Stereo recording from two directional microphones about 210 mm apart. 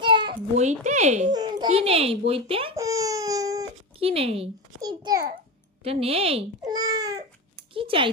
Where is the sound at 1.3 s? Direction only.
20° right (ahead or behind).